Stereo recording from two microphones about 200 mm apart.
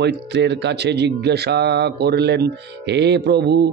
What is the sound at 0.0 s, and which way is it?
Speech, 60° right (ahead or behind).